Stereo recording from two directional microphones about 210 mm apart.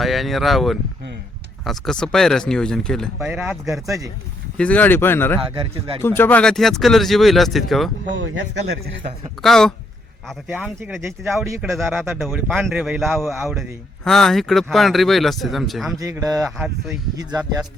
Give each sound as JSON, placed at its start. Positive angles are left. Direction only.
{"t": 0.0, "sound": "speech", "side_deg": 0}
{"t": 3.7, "sound": "speech", "side_deg": -15}
{"t": 4.5, "sound": "speech", "side_deg": 5}
{"t": 5.5, "sound": "speech", "side_deg": -25}
{"t": 6.0, "sound": "speech", "side_deg": 10}
{"t": 9.4, "sound": "speech", "side_deg": 0}
{"t": 16.0, "sound": "speech", "side_deg": -15}
{"t": 16.6, "sound": "speech", "side_deg": 0}